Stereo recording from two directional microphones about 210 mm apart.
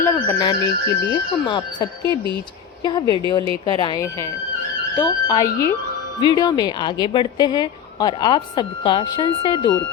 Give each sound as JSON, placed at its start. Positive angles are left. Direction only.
{"t": 0.0, "sound": "a woman's voice", "side_deg": 15}
{"t": 5.3, "sound": "a woman's voice", "side_deg": 15}